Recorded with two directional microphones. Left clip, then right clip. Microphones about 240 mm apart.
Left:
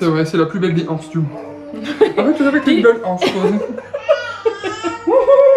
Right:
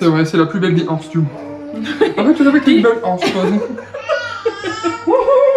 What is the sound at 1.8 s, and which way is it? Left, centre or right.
Chuckle, centre.